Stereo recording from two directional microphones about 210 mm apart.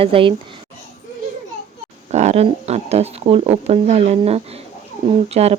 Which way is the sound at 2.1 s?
30° right (ahead or behind).